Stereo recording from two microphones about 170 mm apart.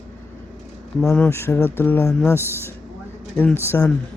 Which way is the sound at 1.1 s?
10° left (ahead or behind).